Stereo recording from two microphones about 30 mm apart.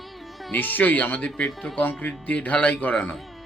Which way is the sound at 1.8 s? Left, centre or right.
Left.